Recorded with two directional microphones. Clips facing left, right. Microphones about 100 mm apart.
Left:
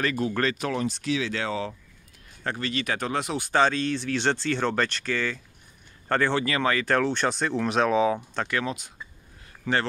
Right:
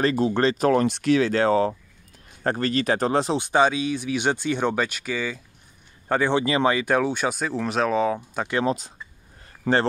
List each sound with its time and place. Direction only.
0.0 s speech: 25° right (ahead or behind)
0.6 s speech: 40° right (ahead or behind)
0.8 s speech: 60° right (ahead or behind); by 3.3 s 30° right (ahead or behind)
3.3 s speech: 15° right (ahead or behind); by 8.5 s centre (ahead or behind)
8.5 s speech: 30° right (ahead or behind)